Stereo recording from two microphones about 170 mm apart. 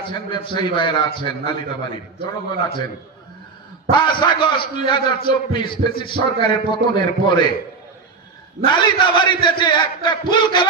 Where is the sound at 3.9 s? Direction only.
25° left (ahead or behind).